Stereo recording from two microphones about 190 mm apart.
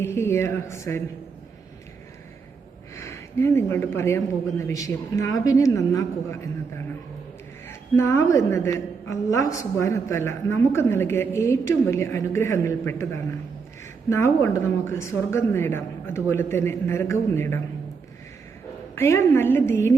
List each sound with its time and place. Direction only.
0.0 s a woman's voice: 15° left (ahead or behind)
2.9 s a woman's voice: 15° left (ahead or behind)
7.7 s a woman's voice: 15° left (ahead or behind)
14.1 s a woman's voice: 15° left (ahead or behind)
18.9 s a woman's voice: 15° left (ahead or behind)